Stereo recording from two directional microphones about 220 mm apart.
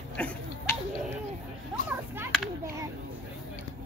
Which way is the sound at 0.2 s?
5° left (ahead or behind).